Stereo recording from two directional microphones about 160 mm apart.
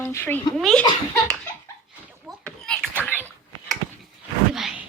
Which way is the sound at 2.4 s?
5° left (ahead or behind).